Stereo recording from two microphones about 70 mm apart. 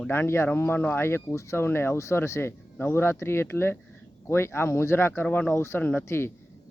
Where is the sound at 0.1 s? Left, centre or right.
Left.